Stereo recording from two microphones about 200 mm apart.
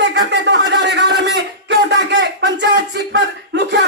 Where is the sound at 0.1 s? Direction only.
60° right (ahead or behind).